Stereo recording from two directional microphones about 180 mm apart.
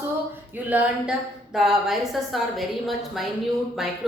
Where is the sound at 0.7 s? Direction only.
10° right (ahead or behind).